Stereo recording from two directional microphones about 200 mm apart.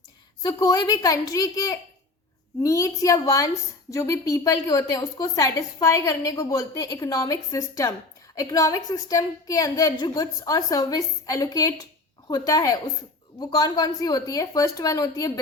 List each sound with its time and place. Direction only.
0.4 s a woman's voice: 20° left (ahead or behind)